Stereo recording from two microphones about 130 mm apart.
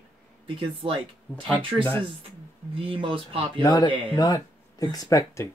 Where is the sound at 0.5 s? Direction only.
40° right (ahead or behind).